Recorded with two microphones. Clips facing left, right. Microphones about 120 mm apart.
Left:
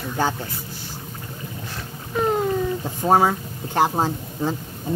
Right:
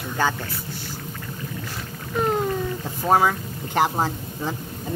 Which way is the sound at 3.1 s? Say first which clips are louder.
Left 1 dB; 35° left (ahead or behind).